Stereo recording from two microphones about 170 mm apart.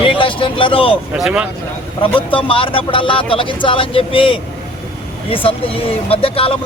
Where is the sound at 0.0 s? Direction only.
30° left (ahead or behind).